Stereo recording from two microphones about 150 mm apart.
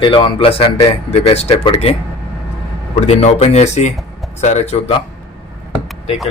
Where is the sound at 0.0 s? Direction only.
35° left (ahead or behind).